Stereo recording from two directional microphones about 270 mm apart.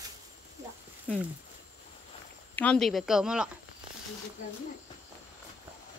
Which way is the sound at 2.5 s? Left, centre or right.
Centre.